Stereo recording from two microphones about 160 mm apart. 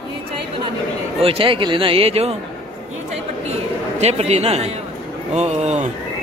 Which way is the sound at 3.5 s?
40° right (ahead or behind).